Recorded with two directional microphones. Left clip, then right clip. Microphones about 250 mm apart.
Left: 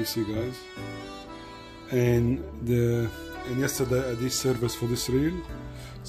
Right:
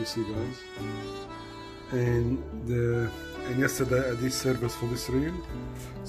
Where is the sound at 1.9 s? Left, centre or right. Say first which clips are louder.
Left 4 dB; left.